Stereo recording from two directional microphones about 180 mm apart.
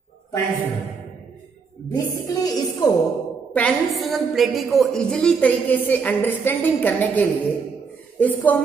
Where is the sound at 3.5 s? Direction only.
5° left (ahead or behind).